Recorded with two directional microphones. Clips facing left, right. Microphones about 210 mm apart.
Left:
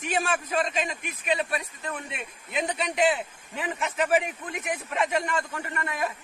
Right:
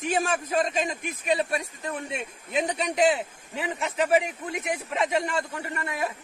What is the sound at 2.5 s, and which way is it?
Speech, 40° right (ahead or behind).